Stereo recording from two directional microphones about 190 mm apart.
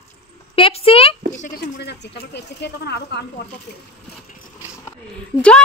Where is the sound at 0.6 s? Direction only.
30° left (ahead or behind).